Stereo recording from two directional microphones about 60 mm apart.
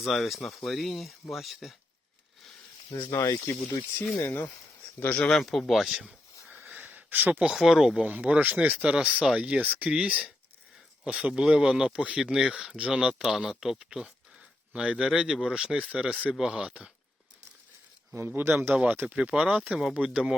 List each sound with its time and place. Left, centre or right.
0.0 s speech: centre
2.9 s speech: left
4.9 s speech: left
5.3 s speech: centre
6.7 s a sound: right
7.4 s speech: centre
8.0 s speech: right
11.2 s speech: centre
14.7 s speech: centre
18.4 s speech: right
18.8 s speech: right
19.1 s speech: centre